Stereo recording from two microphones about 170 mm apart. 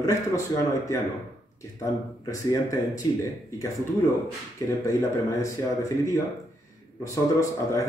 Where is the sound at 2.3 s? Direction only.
20° left (ahead or behind).